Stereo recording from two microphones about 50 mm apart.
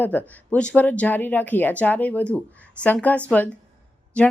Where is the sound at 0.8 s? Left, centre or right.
Left.